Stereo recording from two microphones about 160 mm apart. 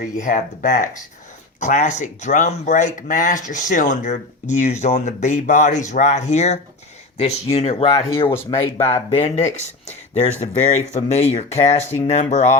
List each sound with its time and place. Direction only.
0.0 s speech: 55° left (ahead or behind)